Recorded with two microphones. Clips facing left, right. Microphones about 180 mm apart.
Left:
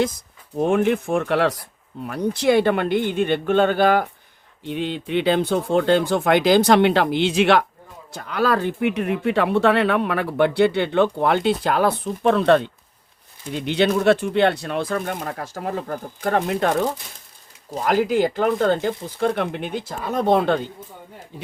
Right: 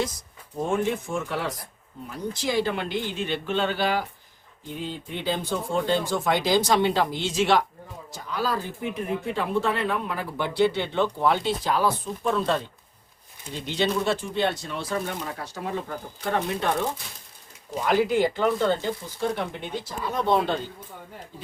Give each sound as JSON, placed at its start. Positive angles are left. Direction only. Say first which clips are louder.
{"t": 0.6, "sound": "speech", "louder": "left 7 dB", "side_deg": 65}
{"t": 4.6, "sound": "speech", "louder": "left 8 dB", "side_deg": 75}
{"t": 17.7, "sound": "speech", "louder": "left 3 dB", "side_deg": 45}